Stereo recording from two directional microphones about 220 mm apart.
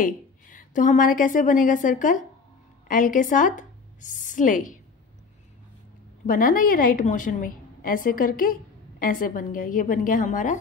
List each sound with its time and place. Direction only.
0.0 s a woman's voice: 40° left (ahead or behind)
6.2 s a woman's voice: 40° left (ahead or behind)